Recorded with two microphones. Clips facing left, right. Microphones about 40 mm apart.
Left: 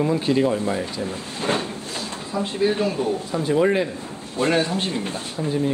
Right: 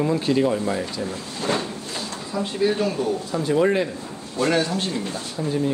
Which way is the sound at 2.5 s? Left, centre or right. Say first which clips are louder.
Even; left.